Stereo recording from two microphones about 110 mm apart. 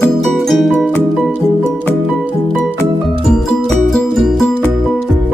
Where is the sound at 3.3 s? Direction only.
5° left (ahead or behind).